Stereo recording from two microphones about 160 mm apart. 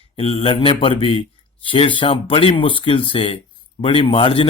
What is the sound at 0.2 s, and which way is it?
Speech, 35° left (ahead or behind).